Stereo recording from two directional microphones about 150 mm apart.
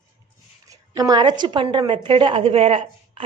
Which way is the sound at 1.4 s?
30° right (ahead or behind).